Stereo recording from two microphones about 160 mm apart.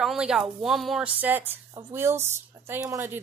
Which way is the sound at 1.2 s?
10° right (ahead or behind).